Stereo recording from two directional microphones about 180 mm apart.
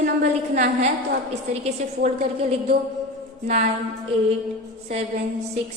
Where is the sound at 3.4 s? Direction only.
40° right (ahead or behind).